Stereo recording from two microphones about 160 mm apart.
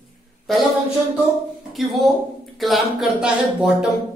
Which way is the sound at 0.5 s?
Centre (ahead or behind).